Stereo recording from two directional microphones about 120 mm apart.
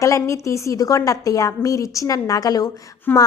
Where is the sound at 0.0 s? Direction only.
25° left (ahead or behind).